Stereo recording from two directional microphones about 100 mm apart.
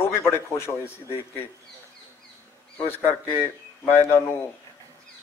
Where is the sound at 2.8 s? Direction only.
25° left (ahead or behind).